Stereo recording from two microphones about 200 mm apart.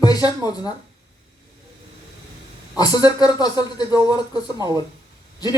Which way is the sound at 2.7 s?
20° left (ahead or behind).